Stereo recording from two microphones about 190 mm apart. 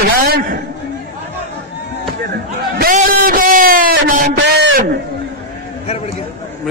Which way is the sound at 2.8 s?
50° right (ahead or behind).